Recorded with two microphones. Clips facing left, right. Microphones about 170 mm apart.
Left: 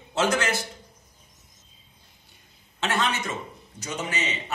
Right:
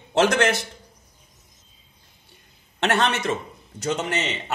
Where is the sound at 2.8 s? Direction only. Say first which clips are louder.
Right 5 dB; 70° right (ahead or behind).